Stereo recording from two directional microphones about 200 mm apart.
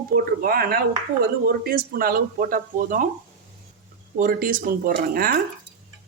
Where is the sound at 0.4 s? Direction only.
50° right (ahead or behind).